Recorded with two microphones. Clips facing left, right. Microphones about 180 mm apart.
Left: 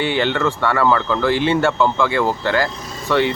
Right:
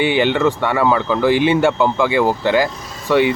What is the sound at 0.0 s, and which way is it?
Speech, 15° right (ahead or behind).